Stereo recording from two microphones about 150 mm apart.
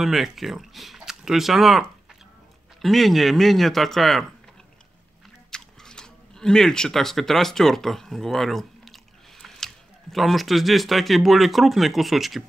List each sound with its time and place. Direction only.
0.0 s speech: centre (ahead or behind)
5.5 s chewing: 5° left (ahead or behind)
10.1 s speech: centre (ahead or behind)